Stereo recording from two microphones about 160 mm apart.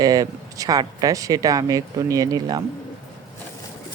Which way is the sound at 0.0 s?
20° right (ahead or behind).